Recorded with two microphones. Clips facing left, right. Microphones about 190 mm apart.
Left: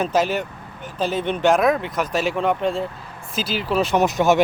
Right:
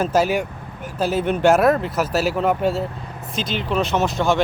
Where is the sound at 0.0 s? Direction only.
10° right (ahead or behind).